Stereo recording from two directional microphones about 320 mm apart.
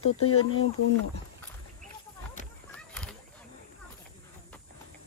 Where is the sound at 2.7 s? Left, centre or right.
Centre.